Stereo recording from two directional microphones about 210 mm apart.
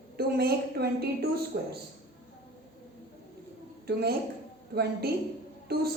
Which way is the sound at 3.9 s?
50° right (ahead or behind).